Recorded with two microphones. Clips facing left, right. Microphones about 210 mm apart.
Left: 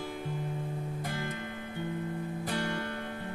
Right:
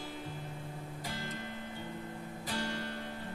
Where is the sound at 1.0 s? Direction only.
55° left (ahead or behind).